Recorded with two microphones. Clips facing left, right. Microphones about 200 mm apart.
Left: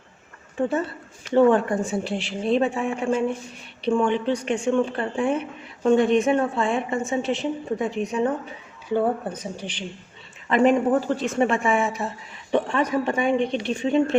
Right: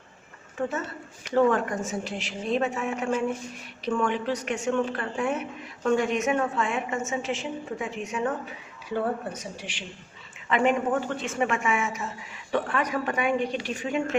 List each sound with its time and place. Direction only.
1.3 s a woman's voice: 30° left (ahead or behind)
12.5 s speech: 20° left (ahead or behind)